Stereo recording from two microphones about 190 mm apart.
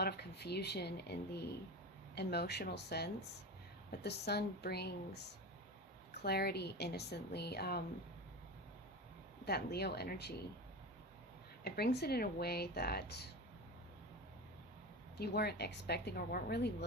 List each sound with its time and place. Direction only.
0.0 s speech: 60° left (ahead or behind)
6.2 s speech: 55° left (ahead or behind)
9.5 s speech: 60° left (ahead or behind)
11.6 s speech: 60° left (ahead or behind)
15.2 s speech: 60° left (ahead or behind)